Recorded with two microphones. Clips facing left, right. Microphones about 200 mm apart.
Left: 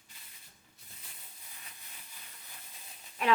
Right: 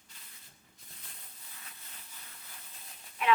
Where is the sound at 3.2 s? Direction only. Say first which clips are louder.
Even; 40° left (ahead or behind).